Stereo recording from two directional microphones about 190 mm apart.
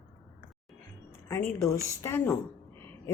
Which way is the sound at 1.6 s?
15° left (ahead or behind).